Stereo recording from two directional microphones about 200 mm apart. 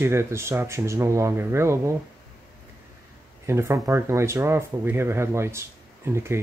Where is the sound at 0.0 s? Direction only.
15° right (ahead or behind).